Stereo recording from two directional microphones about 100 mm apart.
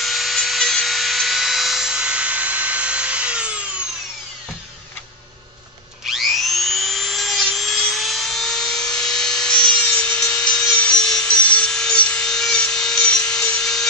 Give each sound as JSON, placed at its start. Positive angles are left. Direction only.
{"t": 0.0, "sound": "rub", "side_deg": 0}
{"t": 6.0, "sound": "helicopter", "side_deg": 0}